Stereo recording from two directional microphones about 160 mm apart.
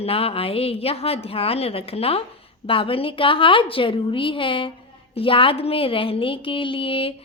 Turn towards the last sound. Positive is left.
turn(degrees=35)  # may be behind; listen again after turning